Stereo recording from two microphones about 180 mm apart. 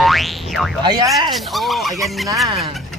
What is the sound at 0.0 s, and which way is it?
Boing, centre (ahead or behind).